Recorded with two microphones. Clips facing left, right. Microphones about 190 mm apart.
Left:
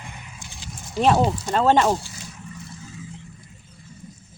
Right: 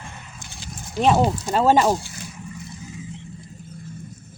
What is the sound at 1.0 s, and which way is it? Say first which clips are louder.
Speech: even; centre (ahead or behind).